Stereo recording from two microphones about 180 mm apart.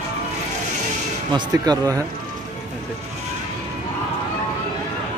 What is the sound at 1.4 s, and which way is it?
Speech, 20° right (ahead or behind).